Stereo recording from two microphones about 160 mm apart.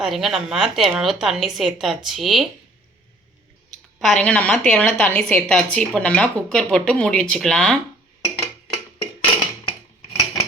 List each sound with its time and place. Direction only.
0.0 s a woman's voice: centre (ahead or behind)
4.0 s a woman's voice: 5° left (ahead or behind)
9.6 s a sound: 25° left (ahead or behind)